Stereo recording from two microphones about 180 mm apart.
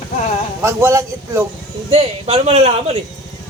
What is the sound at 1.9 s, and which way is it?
Speech, 35° right (ahead or behind).